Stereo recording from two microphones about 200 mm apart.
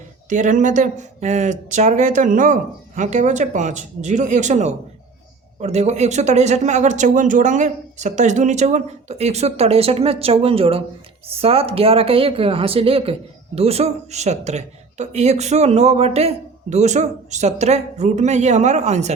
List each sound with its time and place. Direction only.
0.3 s a woman's voice: 40° right (ahead or behind)